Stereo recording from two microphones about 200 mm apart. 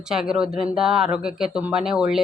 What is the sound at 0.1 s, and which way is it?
Speech, 5° right (ahead or behind).